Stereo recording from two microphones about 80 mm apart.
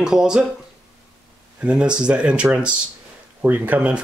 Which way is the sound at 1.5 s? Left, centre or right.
Centre.